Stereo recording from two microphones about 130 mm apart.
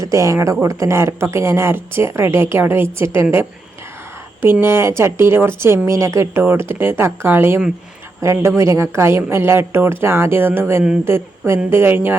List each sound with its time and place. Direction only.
0.0 s speech: 25° right (ahead or behind)
4.6 s a woman's voice: 20° right (ahead or behind)